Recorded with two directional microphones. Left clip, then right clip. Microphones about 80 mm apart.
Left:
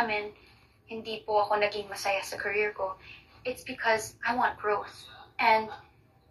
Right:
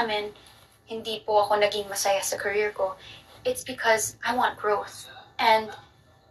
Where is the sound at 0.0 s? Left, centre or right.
Right.